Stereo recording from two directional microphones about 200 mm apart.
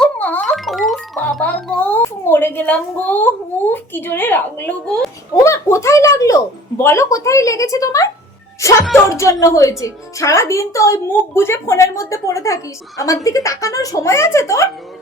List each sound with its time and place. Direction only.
0.0 s music: 10° left (ahead or behind)
3.7 s speech: 10° left (ahead or behind)
5.3 s speech: 15° left (ahead or behind)
9.0 s speech: 15° left (ahead or behind)